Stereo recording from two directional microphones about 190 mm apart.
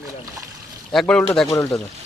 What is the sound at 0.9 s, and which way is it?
Speech, 5° left (ahead or behind).